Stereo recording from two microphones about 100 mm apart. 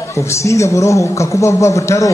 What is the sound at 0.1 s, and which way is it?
A man's voice, 30° left (ahead or behind).